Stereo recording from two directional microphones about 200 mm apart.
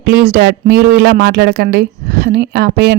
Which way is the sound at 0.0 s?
50° right (ahead or behind).